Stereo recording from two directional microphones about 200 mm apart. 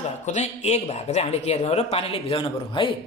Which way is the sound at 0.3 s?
35° left (ahead or behind).